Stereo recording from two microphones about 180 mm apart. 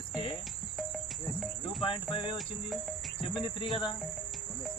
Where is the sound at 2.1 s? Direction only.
30° left (ahead or behind).